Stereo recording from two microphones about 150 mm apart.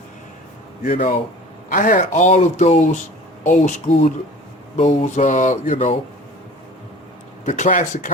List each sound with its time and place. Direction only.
0.9 s speech: 60° left (ahead or behind)
7.4 s speech: 55° left (ahead or behind)